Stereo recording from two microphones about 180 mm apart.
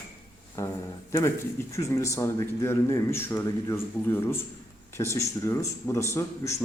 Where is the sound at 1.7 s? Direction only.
15° left (ahead or behind).